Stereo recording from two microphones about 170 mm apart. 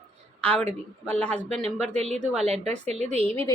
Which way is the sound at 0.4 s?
10° left (ahead or behind).